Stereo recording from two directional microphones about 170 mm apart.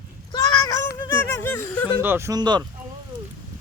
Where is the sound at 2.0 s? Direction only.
15° right (ahead or behind).